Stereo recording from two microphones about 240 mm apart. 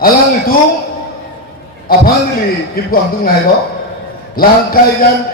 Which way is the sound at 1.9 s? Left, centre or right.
Left.